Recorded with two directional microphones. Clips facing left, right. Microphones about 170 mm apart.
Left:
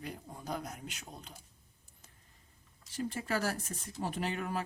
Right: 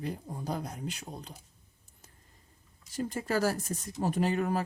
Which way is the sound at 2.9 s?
40° right (ahead or behind).